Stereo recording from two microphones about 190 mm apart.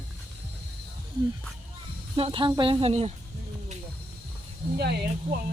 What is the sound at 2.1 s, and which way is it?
Speech, 30° right (ahead or behind).